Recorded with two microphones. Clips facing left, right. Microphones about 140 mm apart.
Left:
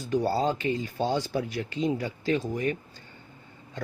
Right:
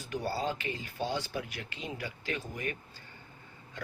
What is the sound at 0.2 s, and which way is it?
Speech, 35° left (ahead or behind).